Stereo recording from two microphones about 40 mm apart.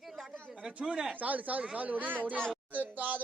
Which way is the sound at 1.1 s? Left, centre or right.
Right.